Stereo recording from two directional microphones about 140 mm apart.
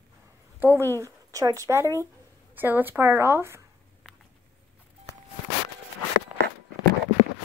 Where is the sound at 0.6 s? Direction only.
15° right (ahead or behind).